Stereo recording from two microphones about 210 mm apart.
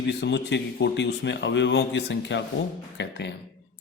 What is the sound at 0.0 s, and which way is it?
Speech, 55° left (ahead or behind).